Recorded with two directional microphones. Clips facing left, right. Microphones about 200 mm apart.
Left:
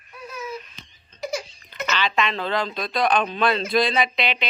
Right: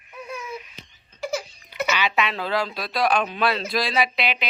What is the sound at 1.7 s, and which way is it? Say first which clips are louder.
Speech: right 1 dB; 10° right (ahead or behind).